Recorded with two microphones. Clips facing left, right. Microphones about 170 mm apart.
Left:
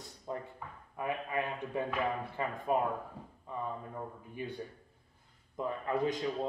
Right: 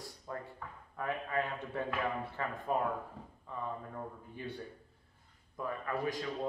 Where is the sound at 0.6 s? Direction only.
15° left (ahead or behind).